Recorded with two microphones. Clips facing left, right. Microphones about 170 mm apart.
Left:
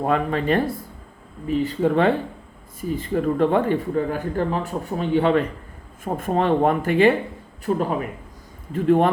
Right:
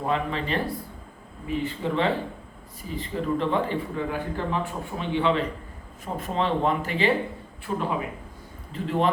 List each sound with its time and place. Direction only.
0.0 s speech: 50° left (ahead or behind)
7.6 s speech: 40° left (ahead or behind)